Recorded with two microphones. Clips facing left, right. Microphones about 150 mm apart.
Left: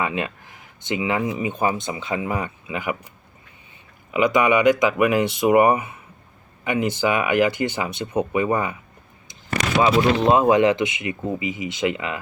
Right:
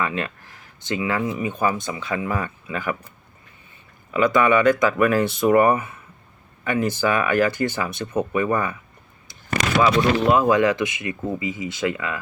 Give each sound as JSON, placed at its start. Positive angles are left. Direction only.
{"t": 0.0, "sound": "speech", "side_deg": 20}
{"t": 4.1, "sound": "speech", "side_deg": 15}
{"t": 9.8, "sound": "speech", "side_deg": 25}